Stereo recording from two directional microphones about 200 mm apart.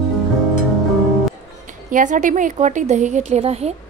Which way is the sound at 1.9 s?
40° right (ahead or behind).